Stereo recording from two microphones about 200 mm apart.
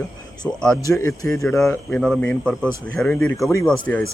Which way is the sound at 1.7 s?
5° left (ahead or behind).